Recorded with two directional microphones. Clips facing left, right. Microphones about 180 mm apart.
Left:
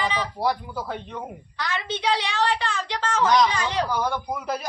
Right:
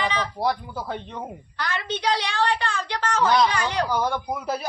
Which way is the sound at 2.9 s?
10° right (ahead or behind).